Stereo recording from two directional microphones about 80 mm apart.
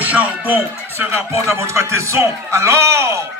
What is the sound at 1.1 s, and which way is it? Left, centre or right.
A man's voice, right.